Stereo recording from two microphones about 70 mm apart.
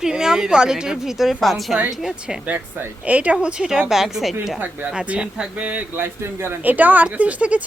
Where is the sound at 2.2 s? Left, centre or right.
Centre.